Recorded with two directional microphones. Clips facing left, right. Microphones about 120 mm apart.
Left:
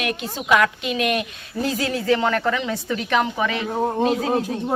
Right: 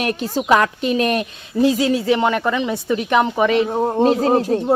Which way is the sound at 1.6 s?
20° right (ahead or behind).